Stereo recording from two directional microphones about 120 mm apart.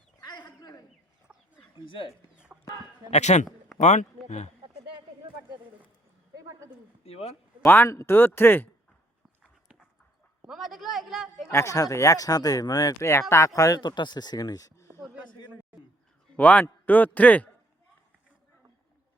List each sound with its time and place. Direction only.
0.2 s a sound: 35° left (ahead or behind)
1.3 s chicken: 5° right (ahead or behind)
1.8 s speech: 45° left (ahead or behind)
3.1 s a man's voice: 70° left (ahead or behind)
4.6 s a sound: 40° right (ahead or behind)
6.3 s a sound: 30° right (ahead or behind)
7.0 s speech: 60° left (ahead or behind)
7.6 s speech: 20° left (ahead or behind)
9.4 s dog: 5° right (ahead or behind)
10.4 s a sound: 5° right (ahead or behind)
11.5 s speech: 25° left (ahead or behind)
16.4 s speech: 10° left (ahead or behind)